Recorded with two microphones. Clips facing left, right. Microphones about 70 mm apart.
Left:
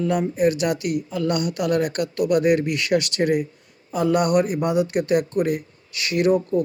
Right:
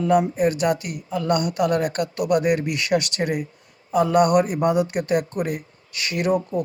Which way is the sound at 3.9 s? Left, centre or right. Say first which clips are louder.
Right 2 dB; right.